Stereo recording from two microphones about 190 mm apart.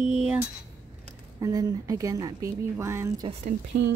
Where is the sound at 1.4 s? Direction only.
20° right (ahead or behind).